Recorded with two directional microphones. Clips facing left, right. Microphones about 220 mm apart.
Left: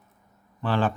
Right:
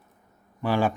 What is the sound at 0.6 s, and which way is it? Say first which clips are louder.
Speech: right 1 dB; 10° right (ahead or behind).